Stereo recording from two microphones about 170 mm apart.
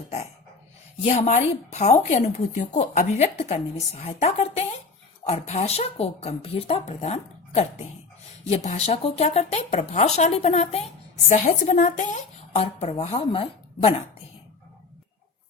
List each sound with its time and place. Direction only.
1.0 s speech: 40° left (ahead or behind)